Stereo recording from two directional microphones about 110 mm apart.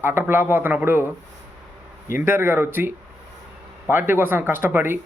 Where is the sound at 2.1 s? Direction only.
20° right (ahead or behind).